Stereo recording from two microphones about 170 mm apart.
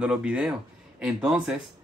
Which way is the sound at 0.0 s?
5° right (ahead or behind).